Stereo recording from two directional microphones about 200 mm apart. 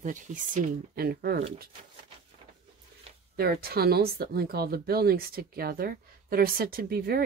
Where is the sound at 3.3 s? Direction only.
50° right (ahead or behind).